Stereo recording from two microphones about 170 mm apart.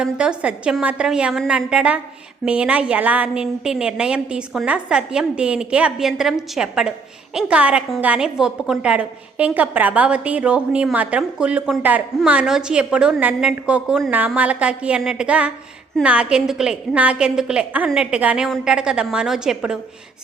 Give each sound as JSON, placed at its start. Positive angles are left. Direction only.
{"t": 0.0, "sound": "a woman's voice", "side_deg": -5}